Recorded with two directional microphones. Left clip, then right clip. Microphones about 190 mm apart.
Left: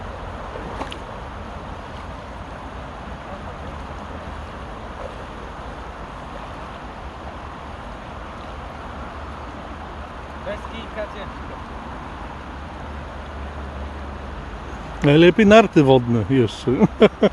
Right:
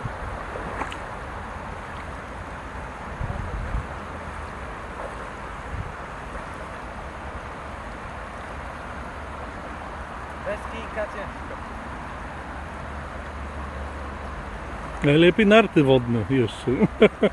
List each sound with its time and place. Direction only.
15.0 s speech: 20° left (ahead or behind)